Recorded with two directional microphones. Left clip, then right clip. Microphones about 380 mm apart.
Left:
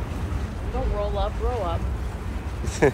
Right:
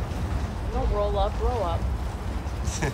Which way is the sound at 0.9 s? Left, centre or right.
Right.